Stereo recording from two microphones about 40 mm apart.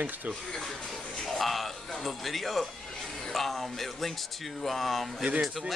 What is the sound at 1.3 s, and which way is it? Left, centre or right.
Music, centre.